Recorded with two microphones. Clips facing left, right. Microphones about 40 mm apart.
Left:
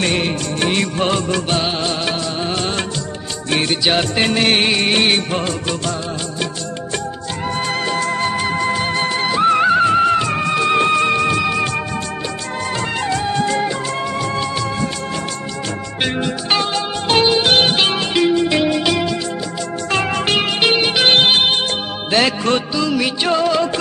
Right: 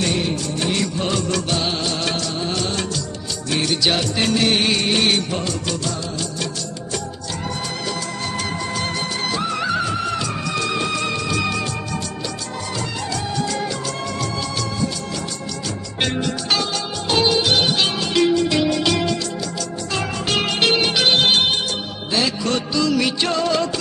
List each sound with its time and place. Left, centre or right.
0.0 s music: left
1.3 s music: left
3.8 s music of bollywood: left
7.9 s music: left
8.3 s music: left
13.0 s music: left
16.2 s music: left
18.1 s music: left
19.9 s music: left
20.3 s music: centre
22.1 s music of bollywood: left
22.8 s music: centre